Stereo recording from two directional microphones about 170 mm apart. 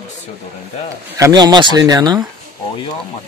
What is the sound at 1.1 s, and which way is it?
Speech, 20° right (ahead or behind).